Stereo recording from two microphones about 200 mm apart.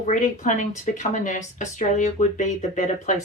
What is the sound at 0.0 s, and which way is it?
A woman's voice, 40° left (ahead or behind).